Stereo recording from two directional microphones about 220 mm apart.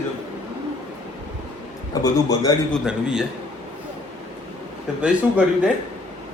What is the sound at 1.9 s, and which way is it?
Speech, 15° left (ahead or behind).